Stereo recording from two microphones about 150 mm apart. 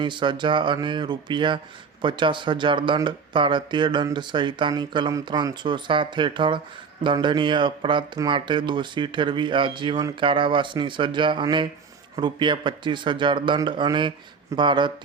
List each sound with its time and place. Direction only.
0.0 s speech: 30° right (ahead or behind)